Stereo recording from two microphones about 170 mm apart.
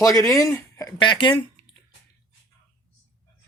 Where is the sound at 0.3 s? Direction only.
20° left (ahead or behind).